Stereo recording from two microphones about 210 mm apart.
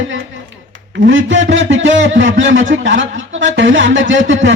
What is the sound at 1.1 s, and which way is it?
A man's voice, 60° right (ahead or behind).